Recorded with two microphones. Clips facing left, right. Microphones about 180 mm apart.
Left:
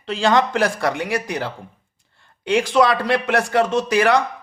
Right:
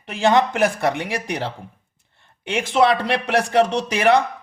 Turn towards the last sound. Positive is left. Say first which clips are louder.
# left 1 dB
turn(degrees=-25)  # may be behind; listen again after turning